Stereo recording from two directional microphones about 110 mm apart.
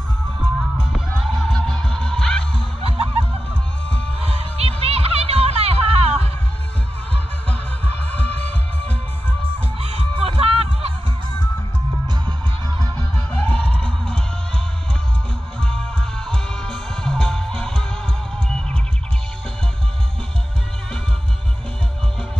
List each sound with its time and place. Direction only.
1.1 s music: centre (ahead or behind)
2.8 s music: 55° right (ahead or behind)
8.1 s music: 15° left (ahead or behind)
9.8 s music: 60° right (ahead or behind)
12.3 s music: 40° right (ahead or behind)
13.3 s music: 10° left (ahead or behind)
16.3 s music: 10° left (ahead or behind)